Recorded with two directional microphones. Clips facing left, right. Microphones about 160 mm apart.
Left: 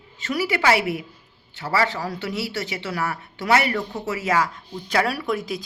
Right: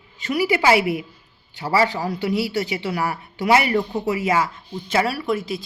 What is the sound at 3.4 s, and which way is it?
Speech, 15° right (ahead or behind).